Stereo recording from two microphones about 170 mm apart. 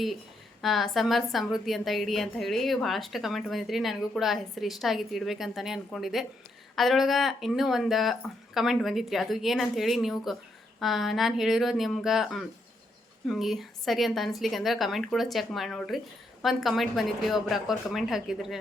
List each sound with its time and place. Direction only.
0.6 s a woman's voice: centre (ahead or behind)